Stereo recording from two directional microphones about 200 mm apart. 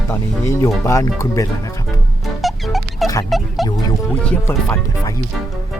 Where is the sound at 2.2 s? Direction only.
Centre (ahead or behind).